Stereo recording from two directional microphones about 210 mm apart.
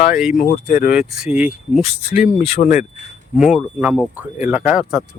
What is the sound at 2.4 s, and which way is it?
Speech, 30° left (ahead or behind).